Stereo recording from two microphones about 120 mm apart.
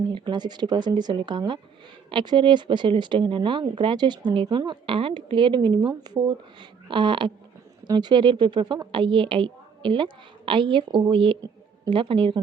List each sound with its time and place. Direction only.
0.1 s a woman's voice: 35° right (ahead or behind)